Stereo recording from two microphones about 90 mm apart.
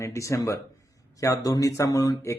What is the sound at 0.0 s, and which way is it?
Speech, 35° left (ahead or behind).